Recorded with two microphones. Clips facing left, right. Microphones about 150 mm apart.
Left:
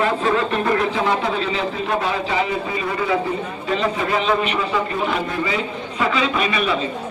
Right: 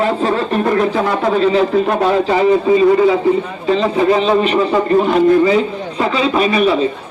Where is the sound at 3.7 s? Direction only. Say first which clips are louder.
Right 7 dB; 35° right (ahead or behind).